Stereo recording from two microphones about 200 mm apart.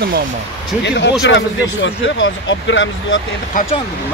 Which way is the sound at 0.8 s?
60° left (ahead or behind).